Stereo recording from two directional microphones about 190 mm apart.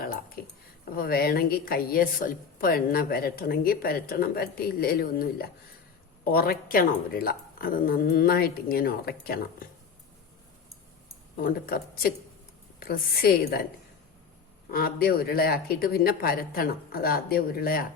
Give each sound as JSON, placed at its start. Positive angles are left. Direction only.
{"t": 0.4, "sound": "speech", "side_deg": 50}
{"t": 11.3, "sound": "speech", "side_deg": 50}
{"t": 14.7, "sound": "speech", "side_deg": 50}